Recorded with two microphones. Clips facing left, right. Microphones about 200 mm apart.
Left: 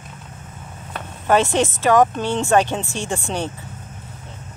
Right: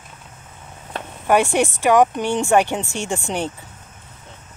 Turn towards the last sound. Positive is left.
turn(degrees=-15)  # may be behind; listen again after turning